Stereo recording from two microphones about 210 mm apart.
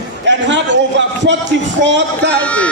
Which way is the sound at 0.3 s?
60° right (ahead or behind).